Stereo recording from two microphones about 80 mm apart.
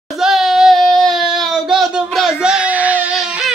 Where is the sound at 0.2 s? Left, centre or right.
Centre.